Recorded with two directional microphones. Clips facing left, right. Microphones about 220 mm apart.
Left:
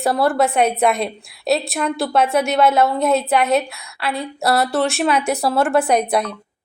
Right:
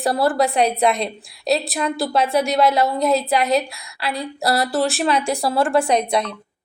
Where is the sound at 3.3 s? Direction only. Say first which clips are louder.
Left 2 dB; 35° right (ahead or behind).